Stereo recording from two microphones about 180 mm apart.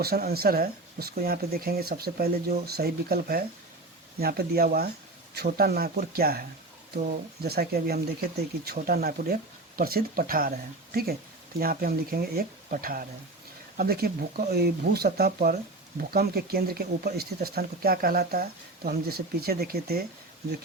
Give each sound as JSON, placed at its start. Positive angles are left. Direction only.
{"t": 0.0, "sound": "speech", "side_deg": -60}
{"t": 7.4, "sound": "speech", "side_deg": -60}